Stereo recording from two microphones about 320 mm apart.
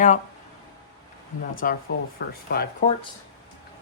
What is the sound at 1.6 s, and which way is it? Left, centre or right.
Speech, left.